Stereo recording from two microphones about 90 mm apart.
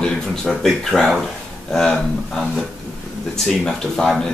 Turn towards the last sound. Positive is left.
turn(degrees=5)  # may be behind; listen again after turning